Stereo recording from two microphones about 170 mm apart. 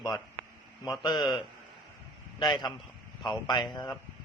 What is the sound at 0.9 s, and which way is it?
Speech, 25° left (ahead or behind).